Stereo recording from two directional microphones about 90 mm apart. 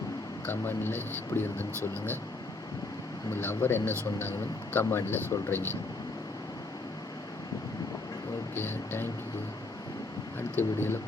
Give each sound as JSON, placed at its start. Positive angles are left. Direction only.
{"t": 0.4, "sound": "a man's voice", "side_deg": 25}
{"t": 3.3, "sound": "a man's voice", "side_deg": 25}
{"t": 8.5, "sound": "a man's voice", "side_deg": 25}
{"t": 10.5, "sound": "a man's voice", "side_deg": 25}